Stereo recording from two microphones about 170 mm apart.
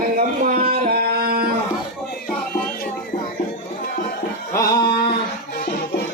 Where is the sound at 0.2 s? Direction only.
55° right (ahead or behind).